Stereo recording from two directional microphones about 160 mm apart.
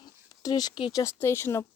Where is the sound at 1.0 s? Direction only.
15° left (ahead or behind).